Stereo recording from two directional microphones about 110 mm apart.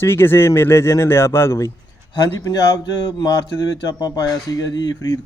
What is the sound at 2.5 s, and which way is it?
Speech, 40° left (ahead or behind).